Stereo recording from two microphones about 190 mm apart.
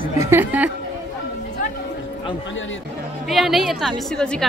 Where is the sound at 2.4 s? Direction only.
85° left.